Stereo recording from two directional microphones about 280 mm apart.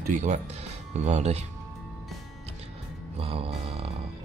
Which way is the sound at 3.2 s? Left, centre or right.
Centre.